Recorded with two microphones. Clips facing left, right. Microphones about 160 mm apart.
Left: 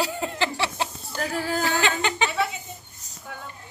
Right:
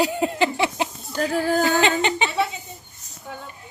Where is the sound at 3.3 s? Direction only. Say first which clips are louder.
Right 3 dB; 25° right (ahead or behind).